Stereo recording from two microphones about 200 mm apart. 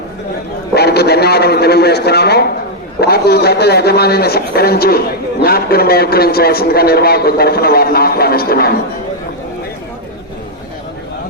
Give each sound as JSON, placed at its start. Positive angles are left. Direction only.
{"t": 0.7, "sound": "a man's voice", "side_deg": 55}